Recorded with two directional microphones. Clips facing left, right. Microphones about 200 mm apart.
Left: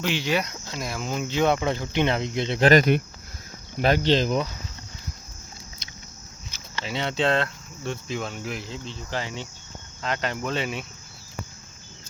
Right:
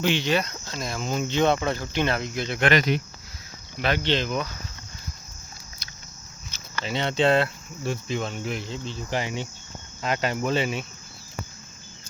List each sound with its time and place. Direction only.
0.0 s speech: 5° left (ahead or behind); by 2.6 s 25° left (ahead or behind)
2.6 s speech: 50° left (ahead or behind)
5.8 s a sound: 25° left (ahead or behind)
6.8 s speech: centre (ahead or behind)
9.0 s cricket: 15° right (ahead or behind)
10.0 s speech: 10° right (ahead or behind)